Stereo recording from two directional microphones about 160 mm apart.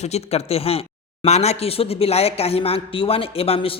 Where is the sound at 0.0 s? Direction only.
40° left (ahead or behind).